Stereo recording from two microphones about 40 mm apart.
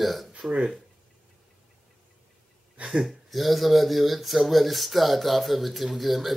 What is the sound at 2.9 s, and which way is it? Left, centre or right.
Speech, centre.